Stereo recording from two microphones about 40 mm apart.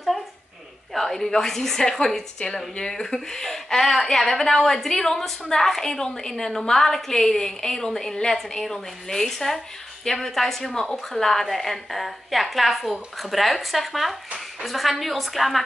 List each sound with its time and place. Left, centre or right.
0.9 s a woman's voice: centre